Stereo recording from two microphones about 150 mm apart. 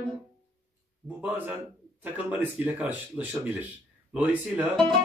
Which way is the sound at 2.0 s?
10° right (ahead or behind).